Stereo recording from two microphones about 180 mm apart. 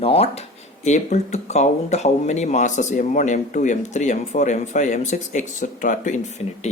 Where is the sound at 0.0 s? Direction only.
35° left (ahead or behind).